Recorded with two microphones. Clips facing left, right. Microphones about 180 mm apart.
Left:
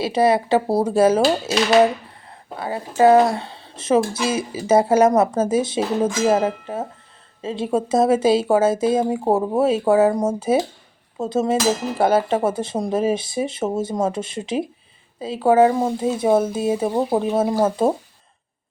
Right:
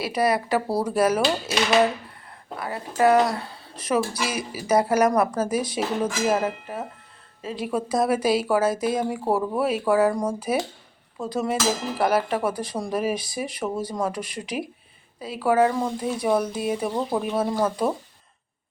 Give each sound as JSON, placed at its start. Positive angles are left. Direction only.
{"t": 0.0, "sound": "speech", "side_deg": 25}
{"t": 2.6, "sound": "speech", "side_deg": 25}